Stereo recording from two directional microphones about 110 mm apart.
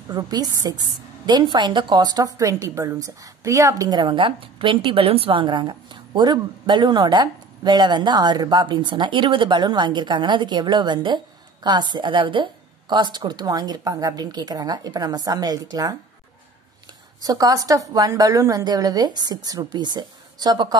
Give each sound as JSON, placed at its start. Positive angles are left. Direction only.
{"t": 0.1, "sound": "a woman's voice", "side_deg": -35}
{"t": 17.2, "sound": "a woman's voice", "side_deg": -35}